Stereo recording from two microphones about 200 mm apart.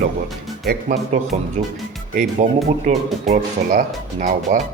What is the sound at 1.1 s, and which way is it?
Speech, 40° right (ahead or behind).